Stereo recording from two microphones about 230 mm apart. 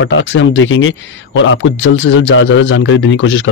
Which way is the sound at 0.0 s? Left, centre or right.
Left.